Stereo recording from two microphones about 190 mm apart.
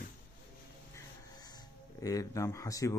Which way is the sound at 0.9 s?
20° left (ahead or behind).